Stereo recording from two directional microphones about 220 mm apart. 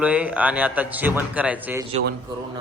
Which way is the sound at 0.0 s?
5° right (ahead or behind).